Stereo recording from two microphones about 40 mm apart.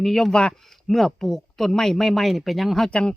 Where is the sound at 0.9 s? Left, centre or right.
Centre.